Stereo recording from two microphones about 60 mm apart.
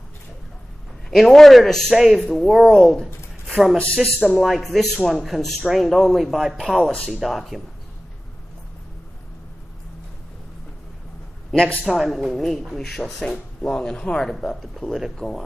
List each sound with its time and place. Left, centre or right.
1.1 s speech: centre
3.4 s a sound: centre
3.7 s speech: centre
4.4 s speech: centre
11.9 s speech: centre
14.9 s speech: centre